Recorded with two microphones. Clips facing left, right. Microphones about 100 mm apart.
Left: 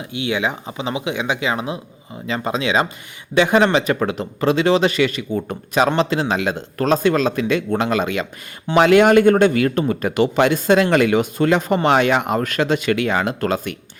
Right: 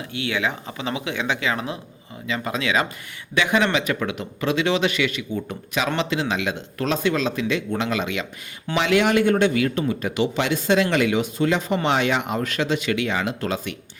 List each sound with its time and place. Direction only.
0.0 s speech: 20° left (ahead or behind)
2.2 s speech: 35° left (ahead or behind)
2.5 s speech: 25° left (ahead or behind)
3.3 s speech: 35° left (ahead or behind); by 13.7 s 50° left (ahead or behind)